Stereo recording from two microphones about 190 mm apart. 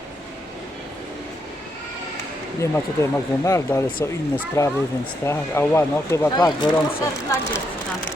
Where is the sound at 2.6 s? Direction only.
15° left (ahead or behind).